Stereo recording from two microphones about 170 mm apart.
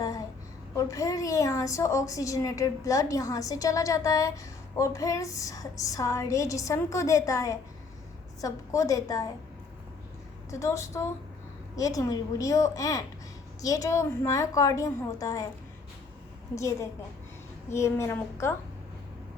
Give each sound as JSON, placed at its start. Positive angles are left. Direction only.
{"t": 0.0, "sound": "a sound", "side_deg": 20}
{"t": 0.8, "sound": "a woman's voice", "side_deg": 20}
{"t": 10.5, "sound": "a child's voice", "side_deg": 15}
{"t": 16.6, "sound": "a child's voice", "side_deg": 15}